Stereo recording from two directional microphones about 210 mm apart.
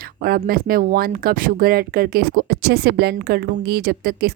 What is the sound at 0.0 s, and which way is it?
Speech, 45° right (ahead or behind).